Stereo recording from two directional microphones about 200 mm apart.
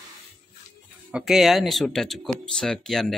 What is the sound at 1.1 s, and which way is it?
Speech, centre (ahead or behind).